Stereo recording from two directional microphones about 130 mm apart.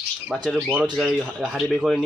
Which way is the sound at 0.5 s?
10° right (ahead or behind).